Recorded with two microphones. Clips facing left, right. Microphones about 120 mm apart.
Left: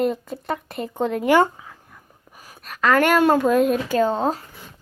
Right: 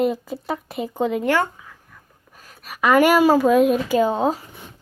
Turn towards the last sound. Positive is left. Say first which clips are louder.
# right 1 dB
turn(degrees=-5)  # may be behind; listen again after turning